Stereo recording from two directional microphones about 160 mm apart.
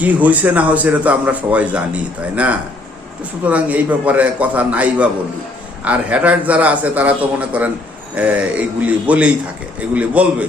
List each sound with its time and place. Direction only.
0.0 s speech: 10° right (ahead or behind)